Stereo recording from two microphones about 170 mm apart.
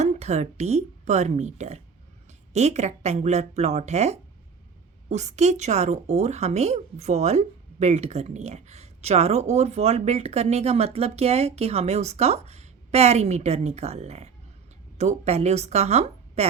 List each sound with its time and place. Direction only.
0.0 s a woman's voice: 40° right (ahead or behind)